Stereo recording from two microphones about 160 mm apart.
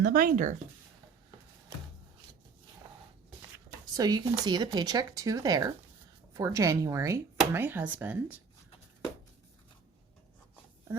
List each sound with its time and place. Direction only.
0.0 s speech: 65° right (ahead or behind)
3.9 s speech: 25° right (ahead or behind); by 8.4 s 10° right (ahead or behind)